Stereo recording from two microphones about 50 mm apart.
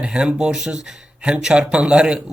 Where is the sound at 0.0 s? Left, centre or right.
Centre.